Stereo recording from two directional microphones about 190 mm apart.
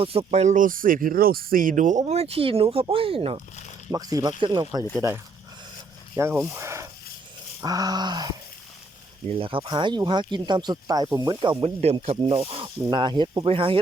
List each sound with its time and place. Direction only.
0.0 s speech: 30° right (ahead or behind)
3.9 s speech: 20° right (ahead or behind)